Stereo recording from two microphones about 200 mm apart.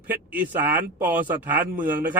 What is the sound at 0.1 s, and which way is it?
Speech, 10° right (ahead or behind).